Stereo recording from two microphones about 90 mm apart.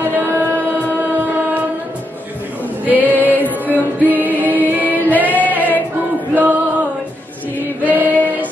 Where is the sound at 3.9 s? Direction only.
20° right (ahead or behind).